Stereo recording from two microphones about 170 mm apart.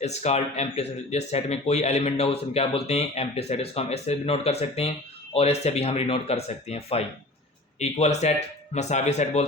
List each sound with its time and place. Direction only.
0.0 s speech: 40° left (ahead or behind)